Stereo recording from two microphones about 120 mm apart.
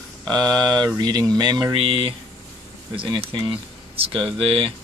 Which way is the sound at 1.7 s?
50° right (ahead or behind).